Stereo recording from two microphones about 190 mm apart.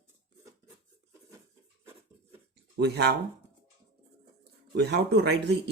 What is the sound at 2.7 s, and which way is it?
Speech, 60° right (ahead or behind).